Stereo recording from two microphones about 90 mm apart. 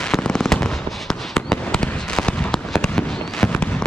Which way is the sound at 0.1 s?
5° left (ahead or behind).